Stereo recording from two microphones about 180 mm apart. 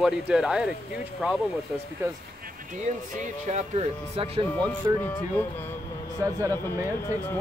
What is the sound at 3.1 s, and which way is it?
Speech, 40° right (ahead or behind).